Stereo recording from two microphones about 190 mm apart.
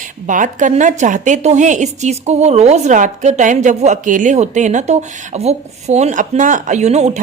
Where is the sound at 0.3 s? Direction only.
40° right (ahead or behind).